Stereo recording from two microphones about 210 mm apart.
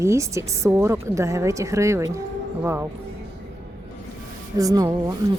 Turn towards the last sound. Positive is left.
turn(degrees=-15)  # may be behind; listen again after turning